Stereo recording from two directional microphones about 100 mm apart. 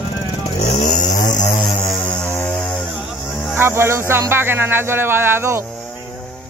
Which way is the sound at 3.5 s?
25° right (ahead or behind).